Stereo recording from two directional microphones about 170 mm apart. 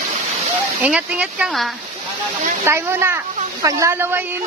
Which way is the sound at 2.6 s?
15° right (ahead or behind).